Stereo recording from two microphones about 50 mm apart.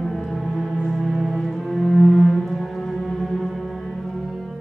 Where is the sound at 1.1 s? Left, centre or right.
Centre.